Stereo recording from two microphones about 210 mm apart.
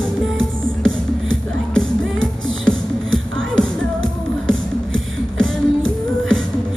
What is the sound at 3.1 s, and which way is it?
Music, 65° right (ahead or behind).